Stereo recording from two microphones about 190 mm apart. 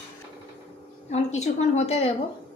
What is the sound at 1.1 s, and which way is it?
A woman's voice, 35° left (ahead or behind).